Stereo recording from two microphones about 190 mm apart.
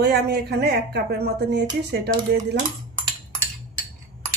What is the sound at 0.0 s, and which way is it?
Speech, 60° right (ahead or behind).